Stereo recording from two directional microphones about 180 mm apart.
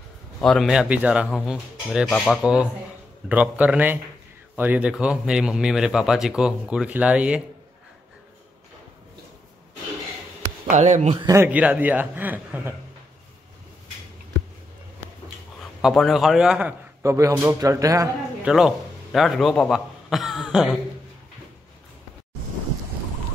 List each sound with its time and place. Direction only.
0.4 s a man's voice: centre (ahead or behind)
10.7 s speech: 40° right (ahead or behind)
11.1 s a man's voice: 15° right (ahead or behind)
15.8 s a man's voice: centre (ahead or behind); by 18.1 s 20° right (ahead or behind)
18.4 s speech: centre (ahead or behind)